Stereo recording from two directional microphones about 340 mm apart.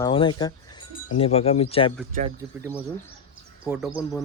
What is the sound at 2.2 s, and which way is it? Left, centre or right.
Speech, centre.